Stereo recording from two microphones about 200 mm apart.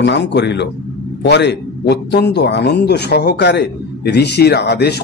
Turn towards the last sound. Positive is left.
turn(degrees=55)  # may be behind; listen again after turning